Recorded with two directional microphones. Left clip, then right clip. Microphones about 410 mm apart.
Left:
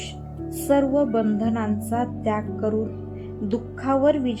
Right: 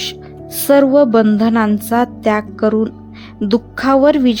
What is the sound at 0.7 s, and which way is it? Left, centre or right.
Speech, right.